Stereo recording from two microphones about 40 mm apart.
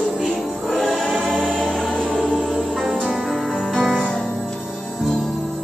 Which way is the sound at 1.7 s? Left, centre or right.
Centre.